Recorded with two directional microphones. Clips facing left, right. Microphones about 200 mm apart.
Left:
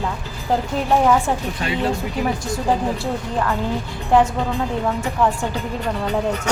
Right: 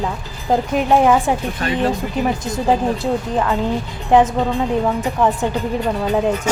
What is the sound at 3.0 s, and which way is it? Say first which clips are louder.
A woman's voice: right 4 dB; 20° right (ahead or behind).